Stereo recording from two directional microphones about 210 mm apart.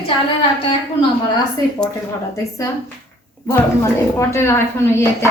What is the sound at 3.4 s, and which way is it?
A woman's voice, 15° left (ahead or behind).